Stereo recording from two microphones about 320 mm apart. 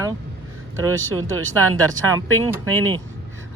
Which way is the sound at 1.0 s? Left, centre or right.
Right.